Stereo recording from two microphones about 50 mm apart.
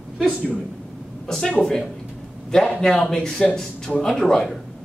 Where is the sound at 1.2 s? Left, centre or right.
Centre.